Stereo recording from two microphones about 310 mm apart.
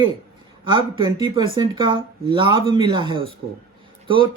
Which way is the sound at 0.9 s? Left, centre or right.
Centre.